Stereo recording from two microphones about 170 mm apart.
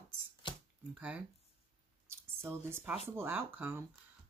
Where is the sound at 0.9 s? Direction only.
10° right (ahead or behind).